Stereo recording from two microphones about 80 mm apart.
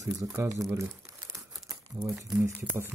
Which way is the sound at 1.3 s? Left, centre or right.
Right.